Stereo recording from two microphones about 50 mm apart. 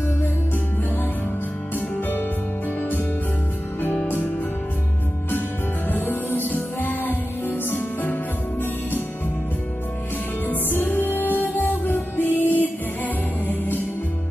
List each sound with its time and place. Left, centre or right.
5.9 s music: left
10.4 s music: left